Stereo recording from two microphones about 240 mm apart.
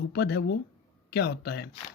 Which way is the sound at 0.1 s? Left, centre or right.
Left.